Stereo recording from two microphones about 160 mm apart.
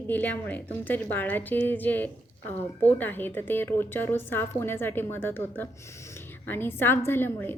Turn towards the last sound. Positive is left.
turn(degrees=10)  # may be behind; listen again after turning